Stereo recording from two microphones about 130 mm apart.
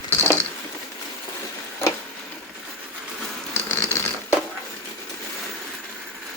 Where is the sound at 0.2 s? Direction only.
20° left (ahead or behind).